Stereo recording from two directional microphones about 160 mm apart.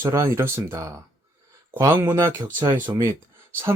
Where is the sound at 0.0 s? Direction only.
15° right (ahead or behind).